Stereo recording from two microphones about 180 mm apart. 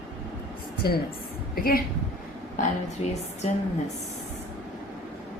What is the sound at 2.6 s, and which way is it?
Speech, 40° left (ahead or behind).